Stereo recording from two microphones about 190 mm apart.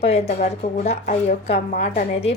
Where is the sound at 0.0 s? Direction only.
35° left (ahead or behind).